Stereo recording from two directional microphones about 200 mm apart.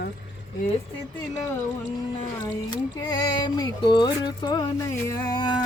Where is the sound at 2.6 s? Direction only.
20° left (ahead or behind).